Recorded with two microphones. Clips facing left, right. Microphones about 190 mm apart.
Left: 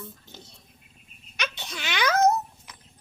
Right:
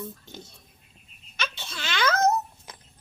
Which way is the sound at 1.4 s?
15° left (ahead or behind).